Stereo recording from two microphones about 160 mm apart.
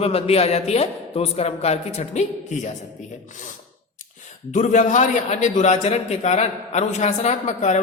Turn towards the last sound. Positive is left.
turn(degrees=50)  # may be behind; listen again after turning